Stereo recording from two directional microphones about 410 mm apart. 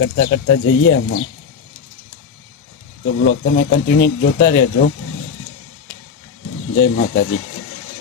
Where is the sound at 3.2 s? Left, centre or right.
Left.